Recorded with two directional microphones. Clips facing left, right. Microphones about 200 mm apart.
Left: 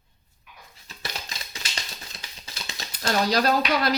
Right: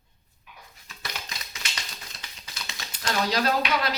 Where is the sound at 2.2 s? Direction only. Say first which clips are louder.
Left 2 dB; 30° left (ahead or behind).